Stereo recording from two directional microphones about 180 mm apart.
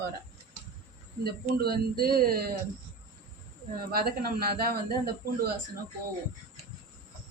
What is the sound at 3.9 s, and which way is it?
Speech, 60° right (ahead or behind).